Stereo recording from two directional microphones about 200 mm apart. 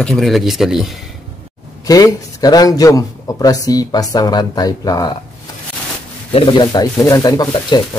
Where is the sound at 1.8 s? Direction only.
20° left (ahead or behind).